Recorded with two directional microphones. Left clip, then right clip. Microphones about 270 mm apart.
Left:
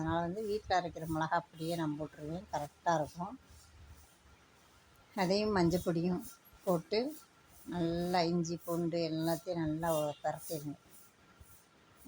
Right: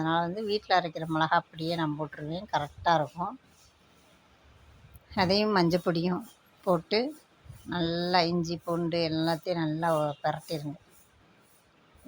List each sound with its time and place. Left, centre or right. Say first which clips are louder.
0.0 s speech: right 7 dB; centre
5.1 s speech: right 7 dB; centre